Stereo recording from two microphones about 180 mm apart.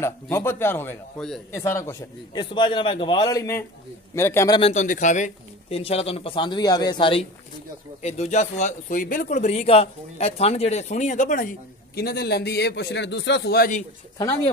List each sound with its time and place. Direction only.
0.0 s a man's voice: 15° left (ahead or behind)
1.5 s a man's voice: 15° left (ahead or behind)
4.6 s speech: 40° left (ahead or behind)
14.1 s a man's voice: 25° left (ahead or behind)